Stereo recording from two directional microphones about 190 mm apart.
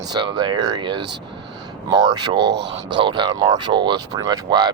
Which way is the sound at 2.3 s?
65° right (ahead or behind).